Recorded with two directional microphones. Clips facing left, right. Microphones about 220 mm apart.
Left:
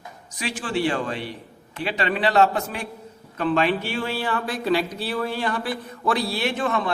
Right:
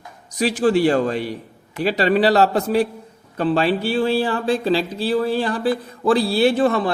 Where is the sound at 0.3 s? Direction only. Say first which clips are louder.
Right 10 dB; 40° right (ahead or behind).